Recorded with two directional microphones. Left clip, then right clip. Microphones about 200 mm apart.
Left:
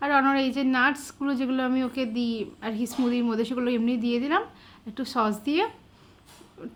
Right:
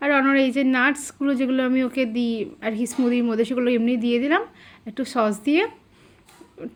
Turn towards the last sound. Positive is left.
turn(degrees=-20)  # may be behind; listen again after turning